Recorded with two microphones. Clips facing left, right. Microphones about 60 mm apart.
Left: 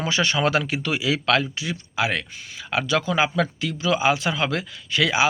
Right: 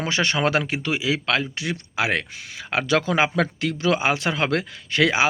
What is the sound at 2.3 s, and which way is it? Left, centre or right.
Speech, right.